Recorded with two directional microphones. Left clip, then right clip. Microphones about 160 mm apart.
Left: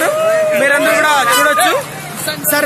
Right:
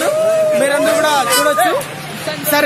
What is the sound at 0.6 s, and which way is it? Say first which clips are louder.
Speech: left 2 dB; 5° left (ahead or behind).